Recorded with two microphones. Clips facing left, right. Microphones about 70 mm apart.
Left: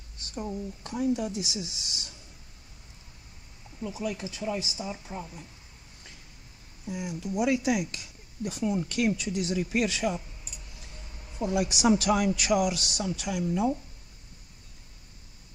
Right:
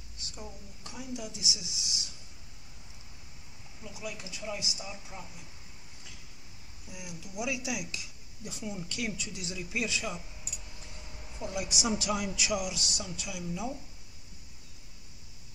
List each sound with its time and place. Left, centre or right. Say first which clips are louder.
0.2 s speech: left 11 dB; left
3.8 s speech: left 9 dB; left
4.2 s speech: left 6 dB; left
6.9 s speech: left 12 dB; left
11.3 s a man's voice: left 8 dB; left